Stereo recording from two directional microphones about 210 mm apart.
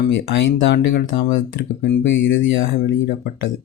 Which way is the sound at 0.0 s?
55° left (ahead or behind).